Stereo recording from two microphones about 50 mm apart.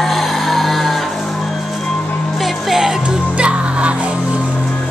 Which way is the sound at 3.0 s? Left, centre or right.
Right.